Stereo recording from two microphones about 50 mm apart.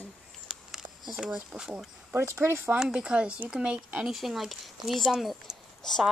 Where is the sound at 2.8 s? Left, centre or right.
Centre.